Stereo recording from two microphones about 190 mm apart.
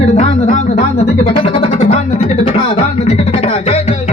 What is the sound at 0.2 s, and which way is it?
Music, 40° left (ahead or behind).